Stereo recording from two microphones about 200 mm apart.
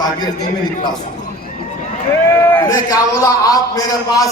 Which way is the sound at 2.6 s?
20° left (ahead or behind).